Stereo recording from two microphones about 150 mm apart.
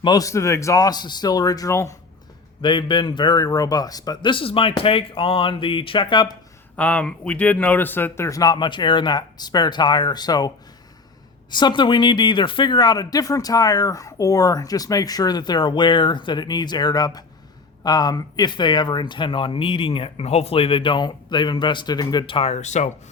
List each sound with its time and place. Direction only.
0.0 s speech: 25° left (ahead or behind)
2.6 s speech: 30° left (ahead or behind)
6.7 s speech: 10° left (ahead or behind); by 10.5 s 25° left (ahead or behind)
11.5 s speech: 30° left (ahead or behind); by 22.9 s 50° left (ahead or behind)